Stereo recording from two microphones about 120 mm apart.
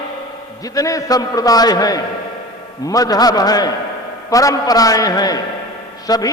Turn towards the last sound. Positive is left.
turn(degrees=30)  # may be behind; listen again after turning